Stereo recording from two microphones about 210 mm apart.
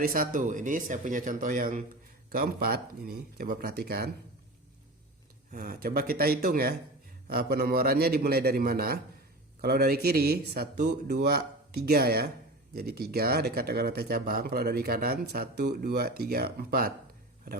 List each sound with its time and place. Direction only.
0.0 s speech: 40° right (ahead or behind)
5.5 s speech: 40° right (ahead or behind)